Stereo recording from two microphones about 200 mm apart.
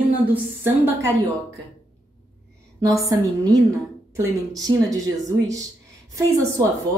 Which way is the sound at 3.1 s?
20° right (ahead or behind).